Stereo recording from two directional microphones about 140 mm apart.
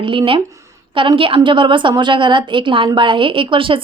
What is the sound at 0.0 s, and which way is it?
A woman's voice, 40° right (ahead or behind).